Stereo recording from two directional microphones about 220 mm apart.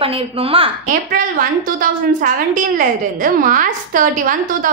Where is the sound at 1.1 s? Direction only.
40° right (ahead or behind).